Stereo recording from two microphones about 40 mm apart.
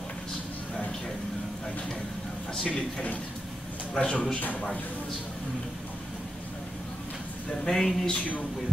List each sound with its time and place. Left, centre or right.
2.6 s a man's voice: left
7.6 s speech: centre
8.1 s a man's voice: left